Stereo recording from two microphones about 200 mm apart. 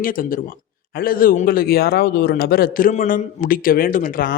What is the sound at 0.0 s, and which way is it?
Speech, 45° left (ahead or behind).